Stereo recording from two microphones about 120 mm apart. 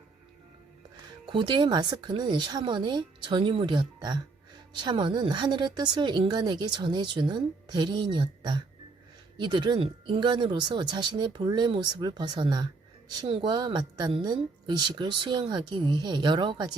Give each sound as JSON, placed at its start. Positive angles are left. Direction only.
{"t": 1.3, "sound": "speech", "side_deg": -40}